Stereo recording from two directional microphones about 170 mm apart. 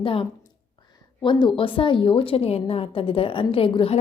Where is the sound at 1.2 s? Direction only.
30° left (ahead or behind).